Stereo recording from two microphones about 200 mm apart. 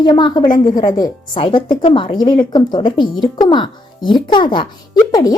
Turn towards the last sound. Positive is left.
turn(degrees=20)  # may be behind; listen again after turning